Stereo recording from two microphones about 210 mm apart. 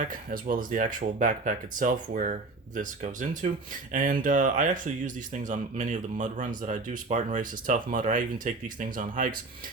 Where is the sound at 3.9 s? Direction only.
40° right (ahead or behind).